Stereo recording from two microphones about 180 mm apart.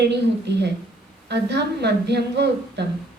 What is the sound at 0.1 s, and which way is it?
A woman's voice, 70° right (ahead or behind).